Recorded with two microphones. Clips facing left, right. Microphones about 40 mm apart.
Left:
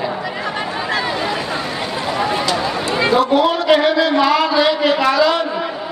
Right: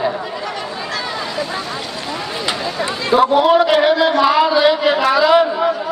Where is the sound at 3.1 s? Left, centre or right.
Centre.